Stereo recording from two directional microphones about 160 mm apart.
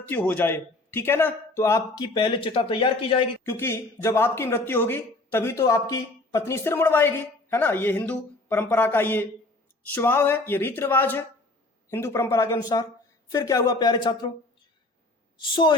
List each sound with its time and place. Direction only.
0.1 s a man's voice: 10° left (ahead or behind)
2.1 s speech: 30° left (ahead or behind)
3.4 s a man's voice: 15° left (ahead or behind)
15.4 s speech: 30° left (ahead or behind)